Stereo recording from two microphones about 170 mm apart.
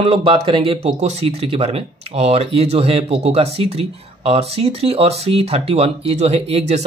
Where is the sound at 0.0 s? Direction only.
35° right (ahead or behind).